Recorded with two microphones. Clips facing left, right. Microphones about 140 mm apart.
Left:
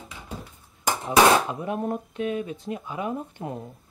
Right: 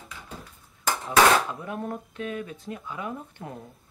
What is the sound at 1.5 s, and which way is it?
Speech, 20° left (ahead or behind).